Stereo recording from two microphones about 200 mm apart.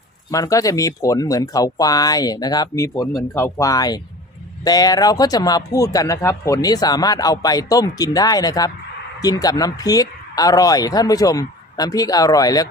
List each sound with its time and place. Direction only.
0.3 s speech: 15° left (ahead or behind)